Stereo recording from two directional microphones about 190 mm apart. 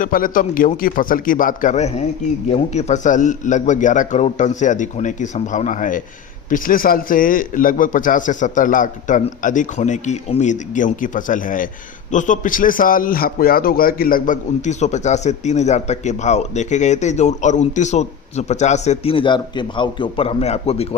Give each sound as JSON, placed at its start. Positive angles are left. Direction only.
{"t": 0.0, "sound": "a man's voice", "side_deg": 45}